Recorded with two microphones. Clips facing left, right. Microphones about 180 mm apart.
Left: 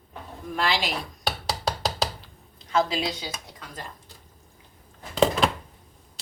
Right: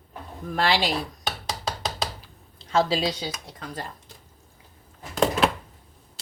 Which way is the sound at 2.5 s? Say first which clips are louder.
Right 2 dB; 30° right (ahead or behind).